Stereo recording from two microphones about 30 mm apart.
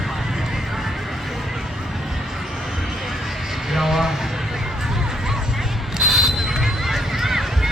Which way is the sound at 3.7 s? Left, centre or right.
Centre.